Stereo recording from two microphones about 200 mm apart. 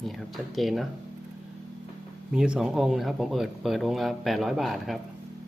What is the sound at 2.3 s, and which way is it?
Speech, 5° right (ahead or behind).